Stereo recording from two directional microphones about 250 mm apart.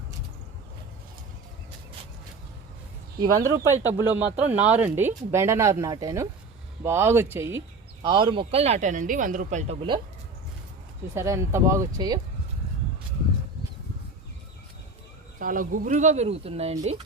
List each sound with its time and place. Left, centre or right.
3.2 s speech: centre
11.1 s speech: centre
15.4 s speech: right